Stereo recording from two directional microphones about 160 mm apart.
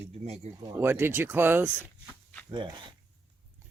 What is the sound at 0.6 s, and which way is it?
Speech, 15° right (ahead or behind).